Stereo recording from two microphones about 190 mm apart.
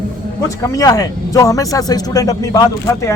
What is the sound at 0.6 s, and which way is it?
Speech, 20° left (ahead or behind).